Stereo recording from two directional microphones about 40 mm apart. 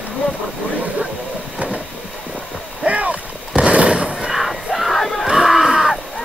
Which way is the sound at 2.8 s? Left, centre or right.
Right.